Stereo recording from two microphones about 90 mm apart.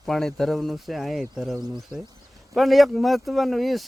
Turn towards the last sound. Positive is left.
turn(degrees=0)  # may be behind; listen again after turning